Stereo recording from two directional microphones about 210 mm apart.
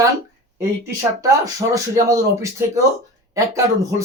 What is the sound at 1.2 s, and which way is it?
Speech, 15° right (ahead or behind).